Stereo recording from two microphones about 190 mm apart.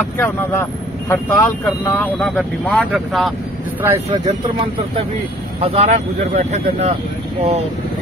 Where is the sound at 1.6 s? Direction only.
5° left (ahead or behind).